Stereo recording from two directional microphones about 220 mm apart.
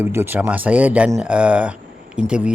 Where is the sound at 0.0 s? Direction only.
10° right (ahead or behind).